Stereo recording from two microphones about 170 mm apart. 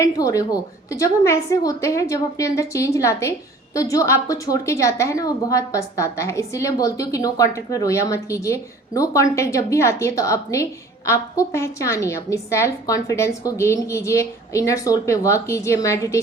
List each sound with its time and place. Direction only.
0.0 s a woman's voice: 20° left (ahead or behind)